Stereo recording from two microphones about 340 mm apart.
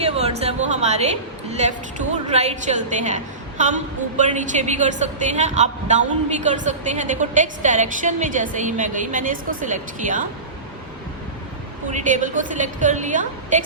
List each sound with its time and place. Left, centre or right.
0.0 s a woman's voice: centre
4.2 s a woman's voice: right
11.9 s a woman's voice: right